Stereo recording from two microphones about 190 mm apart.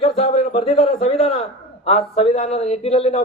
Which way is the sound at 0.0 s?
35° left (ahead or behind).